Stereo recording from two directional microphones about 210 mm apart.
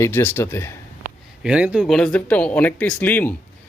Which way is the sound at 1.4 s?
5° right (ahead or behind).